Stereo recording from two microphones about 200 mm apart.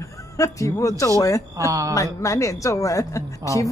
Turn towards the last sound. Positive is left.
turn(degrees=15)  # may be behind; listen again after turning